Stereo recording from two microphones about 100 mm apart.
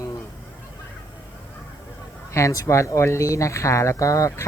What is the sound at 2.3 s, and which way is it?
Speech, 30° left (ahead or behind).